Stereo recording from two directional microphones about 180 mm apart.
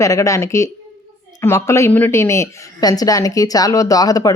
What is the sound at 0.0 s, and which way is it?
A woman's voice, 15° left (ahead or behind).